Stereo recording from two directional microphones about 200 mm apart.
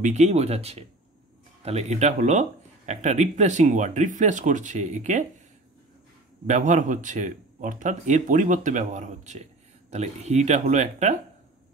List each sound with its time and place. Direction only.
0.0 s speech: 35° right (ahead or behind)
6.4 s speech: 35° right (ahead or behind)